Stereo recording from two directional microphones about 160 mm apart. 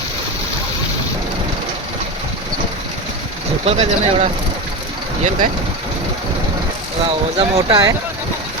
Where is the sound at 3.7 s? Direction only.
40° right (ahead or behind).